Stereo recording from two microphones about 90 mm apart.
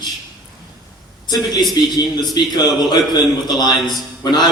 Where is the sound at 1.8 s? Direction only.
50° left (ahead or behind).